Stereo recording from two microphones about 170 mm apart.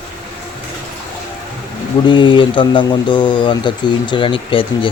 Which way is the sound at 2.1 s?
30° left (ahead or behind).